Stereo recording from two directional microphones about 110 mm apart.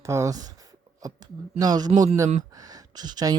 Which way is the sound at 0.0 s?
25° right (ahead or behind).